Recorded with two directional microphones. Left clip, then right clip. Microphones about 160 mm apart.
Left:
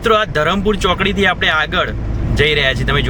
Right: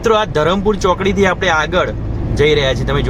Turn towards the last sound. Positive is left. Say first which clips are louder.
# even
turn(degrees=30)  # may be behind; listen again after turning